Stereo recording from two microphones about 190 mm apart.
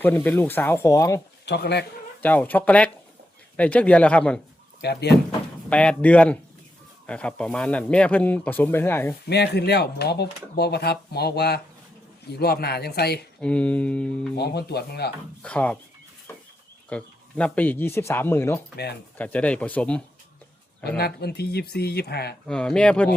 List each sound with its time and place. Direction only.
0.0 s speech: 10° left (ahead or behind)
1.5 s speech: 60° left (ahead or behind)
2.2 s speech: 10° left (ahead or behind)
4.8 s speech: 60° left (ahead or behind)
5.6 s speech: 5° left (ahead or behind)
9.2 s speech: 60° left (ahead or behind)
13.4 s music: 5° left (ahead or behind)
14.3 s speech: 60° left (ahead or behind)
15.4 s speech: 5° left (ahead or behind)
16.9 s speech: 5° left (ahead or behind)
20.8 s speech: 55° left (ahead or behind)
22.4 s music: 5° left (ahead or behind)